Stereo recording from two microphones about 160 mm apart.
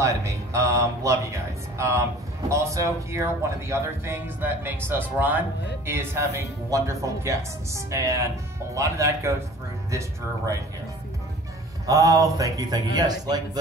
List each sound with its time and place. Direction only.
0.0 s speech: 20° right (ahead or behind)
11.8 s speech: 20° right (ahead or behind)